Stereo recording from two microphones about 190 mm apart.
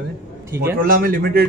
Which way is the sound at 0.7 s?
50° right (ahead or behind).